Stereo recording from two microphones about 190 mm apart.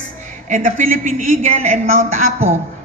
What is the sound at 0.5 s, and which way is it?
Speech, 45° right (ahead or behind).